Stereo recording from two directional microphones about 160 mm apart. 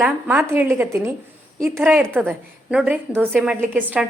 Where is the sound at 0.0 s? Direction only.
10° right (ahead or behind).